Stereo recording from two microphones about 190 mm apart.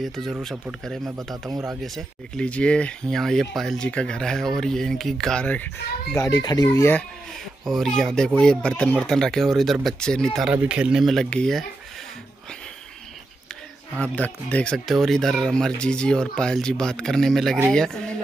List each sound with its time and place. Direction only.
0.0 s speech: centre (ahead or behind)
1.5 s speech: 15° right (ahead or behind)
1.8 s speech: 5° left (ahead or behind)
6.1 s speech: 20° left (ahead or behind)
13.9 s speech: 5° left (ahead or behind)